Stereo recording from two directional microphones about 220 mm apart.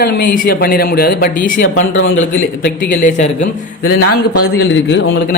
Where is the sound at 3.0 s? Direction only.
35° left (ahead or behind).